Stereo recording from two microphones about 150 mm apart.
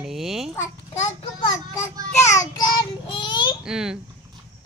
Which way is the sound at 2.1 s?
20° left (ahead or behind).